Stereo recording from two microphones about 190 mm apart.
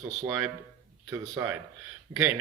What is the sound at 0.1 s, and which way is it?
A man's voice, centre (ahead or behind).